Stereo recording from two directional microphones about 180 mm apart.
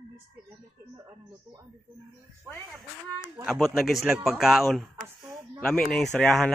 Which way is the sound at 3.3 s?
5° right (ahead or behind).